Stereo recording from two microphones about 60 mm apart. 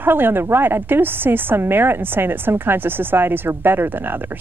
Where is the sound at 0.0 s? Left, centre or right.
Right.